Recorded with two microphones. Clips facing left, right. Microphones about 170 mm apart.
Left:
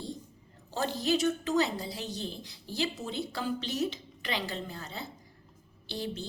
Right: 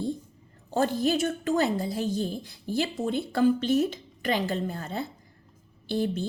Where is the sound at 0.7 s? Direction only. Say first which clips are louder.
Right 5 dB; 50° right (ahead or behind).